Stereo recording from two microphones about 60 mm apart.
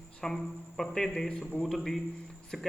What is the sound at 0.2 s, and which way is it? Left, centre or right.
Speech, centre.